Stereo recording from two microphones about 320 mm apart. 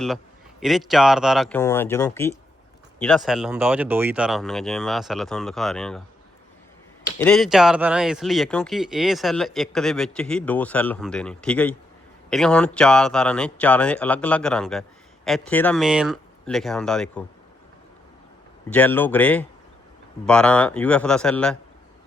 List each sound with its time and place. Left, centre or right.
0.6 s speech: centre
7.2 s speech: centre
18.7 s speech: centre